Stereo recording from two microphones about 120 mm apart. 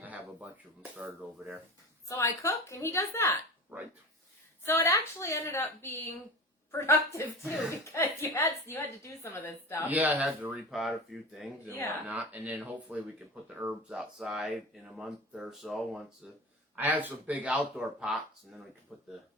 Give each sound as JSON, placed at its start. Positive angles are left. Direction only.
{"t": 0.0, "sound": "a sound", "side_deg": -15}
{"t": 2.0, "sound": "a woman's voice", "side_deg": 25}
{"t": 4.6, "sound": "a woman's voice", "side_deg": 20}
{"t": 9.9, "sound": "speech", "side_deg": -15}
{"t": 12.0, "sound": "speech", "side_deg": -15}
{"t": 16.7, "sound": "speech", "side_deg": -15}